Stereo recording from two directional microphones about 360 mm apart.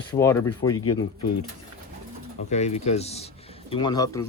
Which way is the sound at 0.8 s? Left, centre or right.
Left.